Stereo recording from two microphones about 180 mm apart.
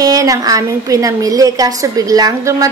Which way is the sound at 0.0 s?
20° right (ahead or behind).